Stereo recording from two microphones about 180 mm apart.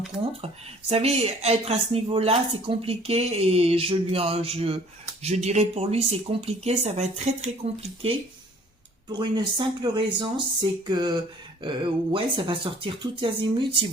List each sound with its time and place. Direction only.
0.4 s speech: 35° right (ahead or behind)
9.1 s speech: 25° right (ahead or behind)